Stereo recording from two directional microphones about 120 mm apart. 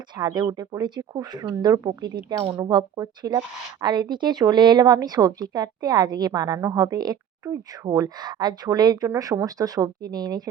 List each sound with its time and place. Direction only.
0.2 s speech: 35° right (ahead or behind)